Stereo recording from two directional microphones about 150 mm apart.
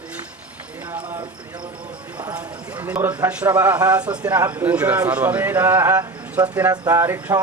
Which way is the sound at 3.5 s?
15° right (ahead or behind).